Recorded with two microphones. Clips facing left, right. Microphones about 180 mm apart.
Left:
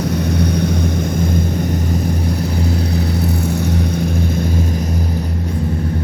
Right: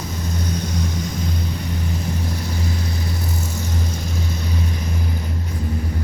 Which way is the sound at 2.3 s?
60° left (ahead or behind).